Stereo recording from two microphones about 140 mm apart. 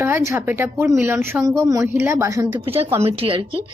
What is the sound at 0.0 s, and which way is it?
Speech, 20° right (ahead or behind).